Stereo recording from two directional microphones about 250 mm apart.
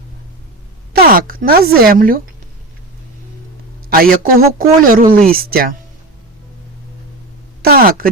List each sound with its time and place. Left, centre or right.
0.9 s speech: right
3.8 s speech: right
7.6 s speech: right